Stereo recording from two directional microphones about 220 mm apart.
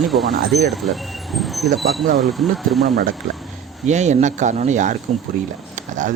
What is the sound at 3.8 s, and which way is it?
Speech, 30° right (ahead or behind).